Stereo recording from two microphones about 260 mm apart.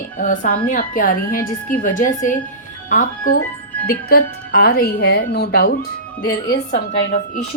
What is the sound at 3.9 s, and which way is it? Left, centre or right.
A woman's voice, left.